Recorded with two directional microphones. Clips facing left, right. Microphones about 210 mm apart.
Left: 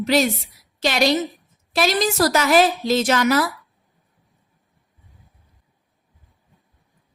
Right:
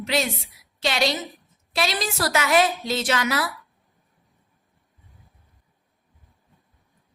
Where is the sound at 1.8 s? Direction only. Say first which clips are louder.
Left 7 dB; 45° left (ahead or behind).